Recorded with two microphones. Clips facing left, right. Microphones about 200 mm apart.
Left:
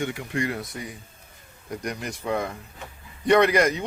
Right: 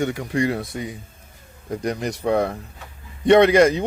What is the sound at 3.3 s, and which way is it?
Speech, 25° right (ahead or behind).